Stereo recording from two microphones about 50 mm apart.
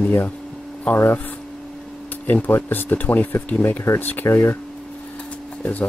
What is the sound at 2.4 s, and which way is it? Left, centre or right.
Speech, left.